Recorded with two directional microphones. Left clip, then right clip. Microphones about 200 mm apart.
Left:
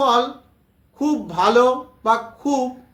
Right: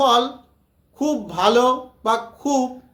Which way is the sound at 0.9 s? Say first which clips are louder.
Left 2 dB; 20° right (ahead or behind).